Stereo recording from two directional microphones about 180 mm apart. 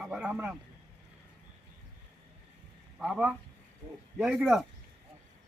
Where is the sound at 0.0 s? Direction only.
5° right (ahead or behind).